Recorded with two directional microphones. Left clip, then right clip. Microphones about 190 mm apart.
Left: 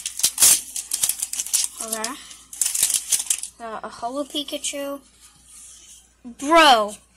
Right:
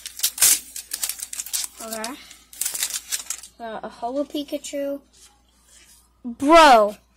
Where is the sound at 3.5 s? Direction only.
30° right (ahead or behind).